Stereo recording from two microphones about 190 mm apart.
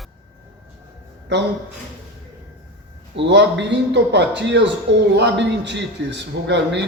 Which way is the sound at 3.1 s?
65° right (ahead or behind).